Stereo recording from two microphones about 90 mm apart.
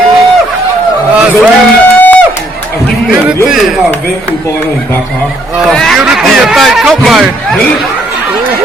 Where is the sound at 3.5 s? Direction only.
Centre (ahead or behind).